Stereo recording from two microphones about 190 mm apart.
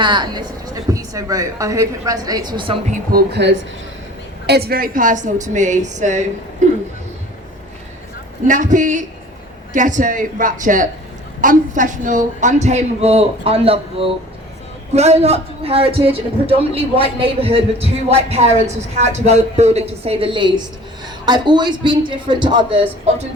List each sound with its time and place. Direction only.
0.0 s a woman's voice: 25° right (ahead or behind)
2.9 s speech: 55° right (ahead or behind); by 3.7 s 70° right (ahead or behind)
4.4 s a man's voice: 60° right (ahead or behind); by 6.2 s 40° right (ahead or behind)
6.6 s a sound: 40° right (ahead or behind)
8.4 s a man's voice: 40° right (ahead or behind); by 22.9 s 25° right (ahead or behind)